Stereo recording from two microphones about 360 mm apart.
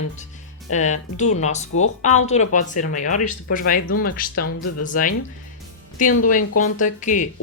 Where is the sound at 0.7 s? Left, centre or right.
Centre.